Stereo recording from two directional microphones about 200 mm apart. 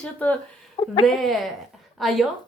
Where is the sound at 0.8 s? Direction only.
25° left (ahead or behind).